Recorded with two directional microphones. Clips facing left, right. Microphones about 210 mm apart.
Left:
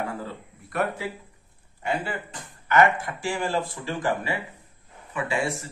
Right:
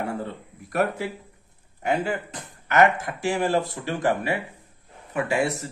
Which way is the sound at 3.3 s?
40° right (ahead or behind).